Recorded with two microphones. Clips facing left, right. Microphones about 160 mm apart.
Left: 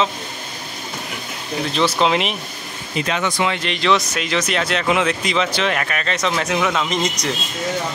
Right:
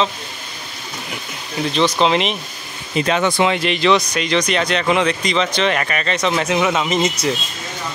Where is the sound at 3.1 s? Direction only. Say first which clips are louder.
Right 4 dB; 30° right (ahead or behind).